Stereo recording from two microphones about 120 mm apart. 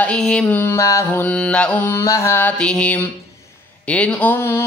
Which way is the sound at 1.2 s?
10° left (ahead or behind).